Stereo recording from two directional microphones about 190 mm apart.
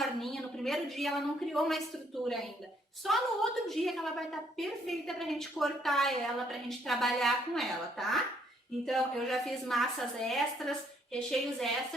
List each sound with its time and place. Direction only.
0.0 s a woman's voice: centre (ahead or behind)
3.0 s a woman's voice: centre (ahead or behind)